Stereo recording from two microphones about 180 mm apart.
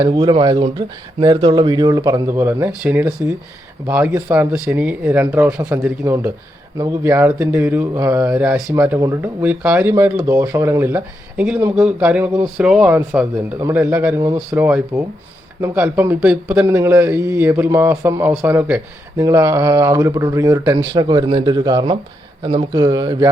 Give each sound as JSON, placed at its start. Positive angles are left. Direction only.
{"t": 0.0, "sound": "speech", "side_deg": -25}
{"t": 8.3, "sound": "speech", "side_deg": -5}